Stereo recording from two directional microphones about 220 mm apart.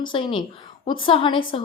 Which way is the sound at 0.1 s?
25° left (ahead or behind).